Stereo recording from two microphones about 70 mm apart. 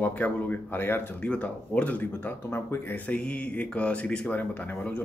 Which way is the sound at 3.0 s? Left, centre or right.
Centre.